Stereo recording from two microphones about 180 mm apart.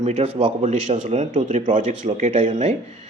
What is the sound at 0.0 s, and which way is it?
Speech, 35° right (ahead or behind).